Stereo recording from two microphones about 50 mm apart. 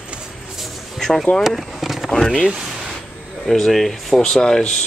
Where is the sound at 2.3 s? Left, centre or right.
Centre.